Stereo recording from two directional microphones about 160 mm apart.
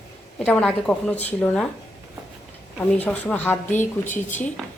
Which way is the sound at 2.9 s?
10° left (ahead or behind).